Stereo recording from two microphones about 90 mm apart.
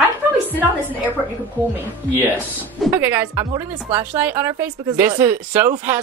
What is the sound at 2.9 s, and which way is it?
Speech, 25° right (ahead or behind).